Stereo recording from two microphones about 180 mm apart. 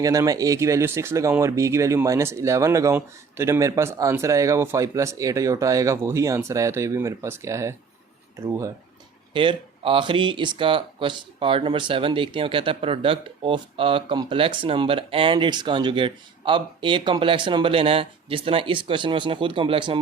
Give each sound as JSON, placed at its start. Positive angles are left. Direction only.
{"t": 0.0, "sound": "speech", "side_deg": -20}
{"t": 9.3, "sound": "speech", "side_deg": -30}